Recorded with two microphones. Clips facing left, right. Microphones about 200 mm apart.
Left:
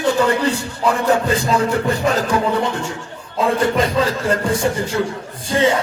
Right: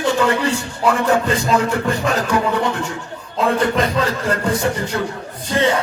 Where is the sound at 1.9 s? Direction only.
30° left (ahead or behind).